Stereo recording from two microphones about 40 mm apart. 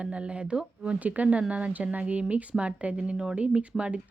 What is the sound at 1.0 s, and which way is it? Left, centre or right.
A woman's voice, right.